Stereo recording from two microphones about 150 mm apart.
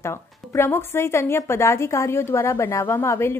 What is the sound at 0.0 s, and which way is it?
A woman's voice, 15° left (ahead or behind).